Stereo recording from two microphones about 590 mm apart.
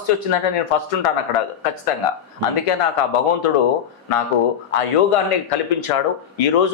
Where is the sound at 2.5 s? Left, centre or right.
Left.